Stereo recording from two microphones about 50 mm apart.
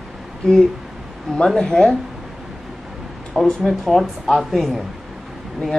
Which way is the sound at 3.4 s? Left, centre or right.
Centre.